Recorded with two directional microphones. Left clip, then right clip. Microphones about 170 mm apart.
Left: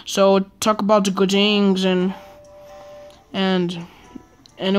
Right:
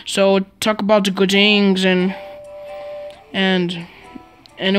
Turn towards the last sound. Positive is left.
turn(degrees=-5)  # may be behind; listen again after turning